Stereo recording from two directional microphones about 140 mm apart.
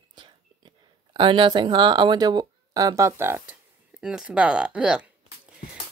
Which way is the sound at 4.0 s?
5° right (ahead or behind).